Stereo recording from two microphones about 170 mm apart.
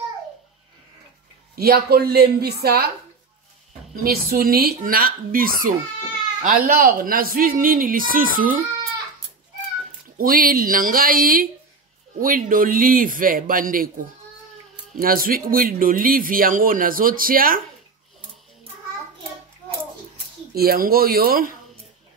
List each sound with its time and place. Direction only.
1.5 s a woman's voice: 65° right (ahead or behind)
3.9 s speech: 60° right (ahead or behind)
10.1 s speech: 60° right (ahead or behind)
15.0 s speech: 60° right (ahead or behind)
20.5 s speech: 60° right (ahead or behind)